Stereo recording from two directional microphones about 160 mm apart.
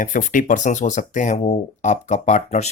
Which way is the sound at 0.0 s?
55° left (ahead or behind).